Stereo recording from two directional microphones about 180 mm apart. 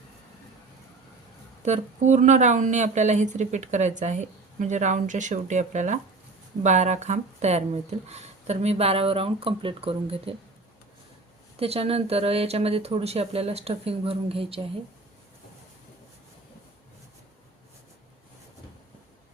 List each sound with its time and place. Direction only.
1.6 s speech: 40° right (ahead or behind)
11.6 s speech: 35° right (ahead or behind)